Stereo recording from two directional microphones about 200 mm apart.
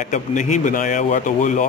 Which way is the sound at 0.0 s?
40° left (ahead or behind).